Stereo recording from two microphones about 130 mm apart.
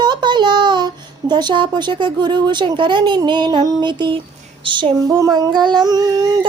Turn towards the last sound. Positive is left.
turn(degrees=-30)  # may be behind; listen again after turning